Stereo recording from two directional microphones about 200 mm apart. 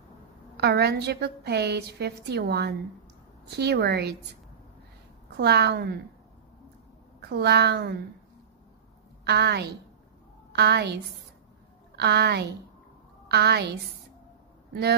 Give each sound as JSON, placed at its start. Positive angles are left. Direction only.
{"t": 0.6, "sound": "a woman's voice", "side_deg": -55}
{"t": 5.4, "sound": "a woman's voice", "side_deg": -55}
{"t": 7.2, "sound": "a woman's voice", "side_deg": -55}
{"t": 9.2, "sound": "a woman's voice", "side_deg": -55}